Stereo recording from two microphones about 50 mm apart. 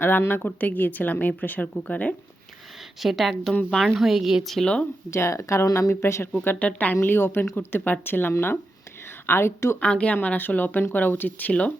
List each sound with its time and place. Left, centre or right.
0.0 s a woman's voice: left
3.0 s a woman's voice: centre
4.0 s a woman's voice: centre
4.6 s a woman's voice: centre
5.1 s speech: left
6.4 s a woman's voice: left
6.9 s speech: left
9.2 s a woman's voice: left
9.8 s a woman's voice: left
10.2 s a woman's voice: left